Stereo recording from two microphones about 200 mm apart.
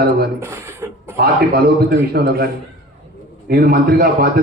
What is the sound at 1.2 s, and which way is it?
A man's voice, 50° right (ahead or behind).